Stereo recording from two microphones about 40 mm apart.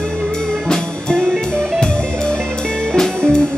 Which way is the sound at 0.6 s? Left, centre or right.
Centre.